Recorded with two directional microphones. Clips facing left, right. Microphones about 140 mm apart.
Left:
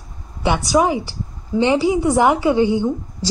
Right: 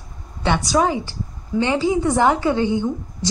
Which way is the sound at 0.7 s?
10° left (ahead or behind).